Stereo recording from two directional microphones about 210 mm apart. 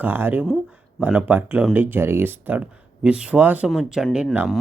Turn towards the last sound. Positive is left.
turn(degrees=0)  # may be behind; listen again after turning